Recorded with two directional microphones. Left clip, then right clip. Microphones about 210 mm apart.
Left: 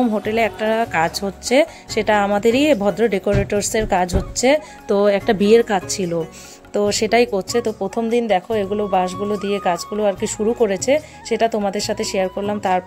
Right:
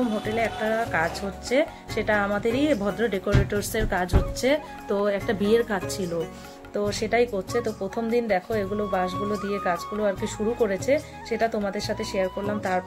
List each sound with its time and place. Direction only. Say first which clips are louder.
0.2 s speech: left 7 dB; 50° left (ahead or behind)
9.1 s speech: left 6 dB; centre (ahead or behind)
9.9 s speech: left 7 dB; 35° left (ahead or behind)